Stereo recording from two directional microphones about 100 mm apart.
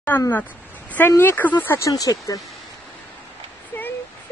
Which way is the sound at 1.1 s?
20° left (ahead or behind).